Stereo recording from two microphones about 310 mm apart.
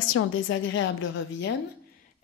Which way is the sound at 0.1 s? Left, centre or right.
Left.